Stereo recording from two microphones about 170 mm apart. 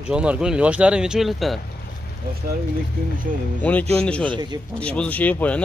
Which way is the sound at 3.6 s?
10° left (ahead or behind).